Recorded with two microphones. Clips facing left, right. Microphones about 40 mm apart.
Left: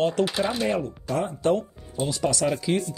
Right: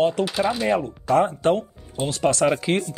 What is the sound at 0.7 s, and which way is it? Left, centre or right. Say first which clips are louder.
Speech: right 5 dB; right.